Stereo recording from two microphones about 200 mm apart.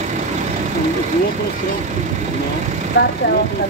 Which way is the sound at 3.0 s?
55° left (ahead or behind).